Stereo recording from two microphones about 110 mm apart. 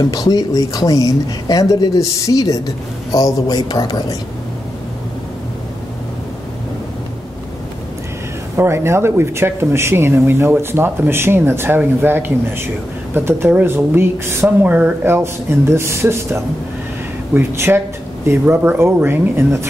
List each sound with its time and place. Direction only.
0.0 s speech: 35° left (ahead or behind)
8.5 s speech: 25° right (ahead or behind)